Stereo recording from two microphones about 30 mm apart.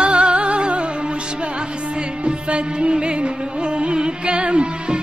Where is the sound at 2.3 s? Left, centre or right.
Right.